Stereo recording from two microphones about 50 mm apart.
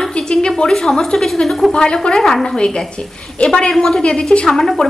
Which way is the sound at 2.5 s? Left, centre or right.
Centre.